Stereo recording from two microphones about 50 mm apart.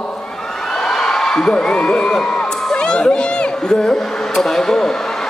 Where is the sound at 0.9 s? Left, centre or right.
Centre.